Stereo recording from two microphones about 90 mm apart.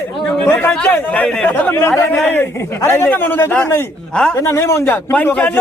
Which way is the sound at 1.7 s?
25° left (ahead or behind).